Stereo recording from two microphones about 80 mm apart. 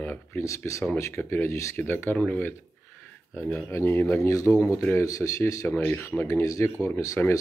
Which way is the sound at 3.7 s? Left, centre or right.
Left.